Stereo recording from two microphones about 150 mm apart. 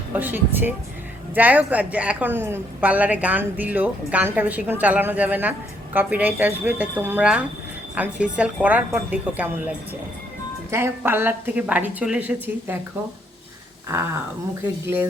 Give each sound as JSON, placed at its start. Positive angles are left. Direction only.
{"t": 0.1, "sound": "a woman's voice", "side_deg": -10}
{"t": 13.8, "sound": "a woman's voice", "side_deg": -15}